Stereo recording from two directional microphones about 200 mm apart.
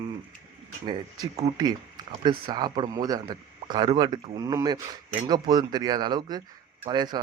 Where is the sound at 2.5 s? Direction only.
20° right (ahead or behind).